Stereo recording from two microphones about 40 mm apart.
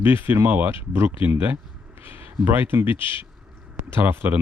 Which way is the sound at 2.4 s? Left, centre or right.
Right.